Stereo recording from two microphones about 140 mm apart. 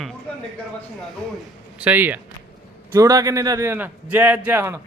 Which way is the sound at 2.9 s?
25° right (ahead or behind).